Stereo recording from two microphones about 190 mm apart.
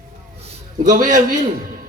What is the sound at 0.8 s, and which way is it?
Speech, 45° right (ahead or behind).